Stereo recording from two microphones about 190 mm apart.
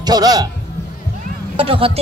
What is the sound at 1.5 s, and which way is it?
Speech, 30° right (ahead or behind).